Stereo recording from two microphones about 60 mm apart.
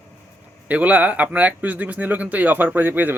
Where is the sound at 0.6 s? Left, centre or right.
Right.